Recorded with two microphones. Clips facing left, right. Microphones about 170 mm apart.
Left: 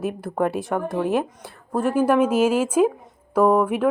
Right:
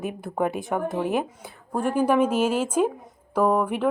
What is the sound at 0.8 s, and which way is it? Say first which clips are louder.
Speech: left 2 dB; 20° right (ahead or behind).